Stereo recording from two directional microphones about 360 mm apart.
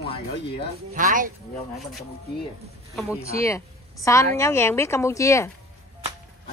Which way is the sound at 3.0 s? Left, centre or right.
Centre.